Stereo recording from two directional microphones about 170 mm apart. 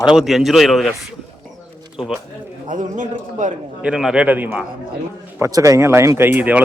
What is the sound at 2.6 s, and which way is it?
Speech, 50° right (ahead or behind).